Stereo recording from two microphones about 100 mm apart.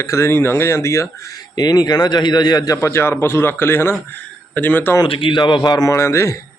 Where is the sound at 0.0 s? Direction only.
25° left (ahead or behind).